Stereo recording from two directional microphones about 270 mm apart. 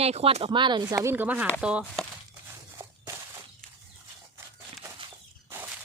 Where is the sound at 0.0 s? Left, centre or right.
Right; by 1.5 s centre.